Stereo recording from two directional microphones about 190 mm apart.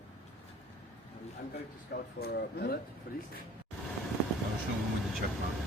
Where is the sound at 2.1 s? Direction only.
55° left (ahead or behind).